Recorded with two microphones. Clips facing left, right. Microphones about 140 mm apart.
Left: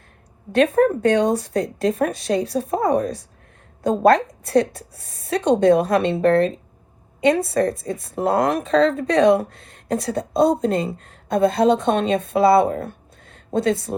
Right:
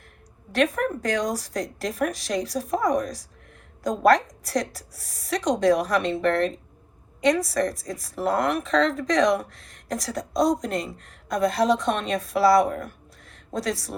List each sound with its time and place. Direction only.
0.6 s a woman's voice: 35° left (ahead or behind)
7.3 s a woman's voice: 30° left (ahead or behind)